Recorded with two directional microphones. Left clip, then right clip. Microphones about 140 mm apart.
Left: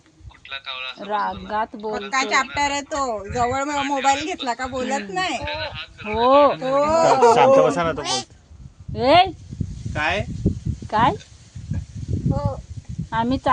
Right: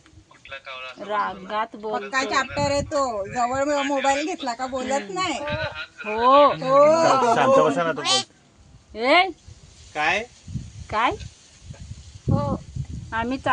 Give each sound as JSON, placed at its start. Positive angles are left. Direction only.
{"t": 0.5, "sound": "speech", "side_deg": 25}
{"t": 7.0, "sound": "speech", "side_deg": 25}
{"t": 8.0, "sound": "speech", "side_deg": 10}
{"t": 9.0, "sound": "speech", "side_deg": 50}
{"t": 9.9, "sound": "speech", "side_deg": 30}
{"t": 10.8, "sound": "speech", "side_deg": 50}
{"t": 13.1, "sound": "speech", "side_deg": 55}